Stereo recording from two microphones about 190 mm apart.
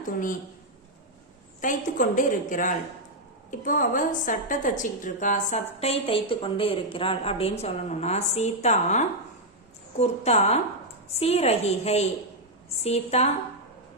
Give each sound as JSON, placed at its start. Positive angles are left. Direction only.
{"t": 1.6, "sound": "a woman's voice", "side_deg": 45}